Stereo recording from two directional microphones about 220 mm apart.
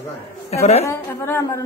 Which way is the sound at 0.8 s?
15° left (ahead or behind).